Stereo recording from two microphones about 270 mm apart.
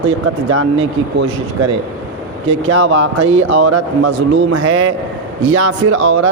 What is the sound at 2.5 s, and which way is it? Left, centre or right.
Speech, right.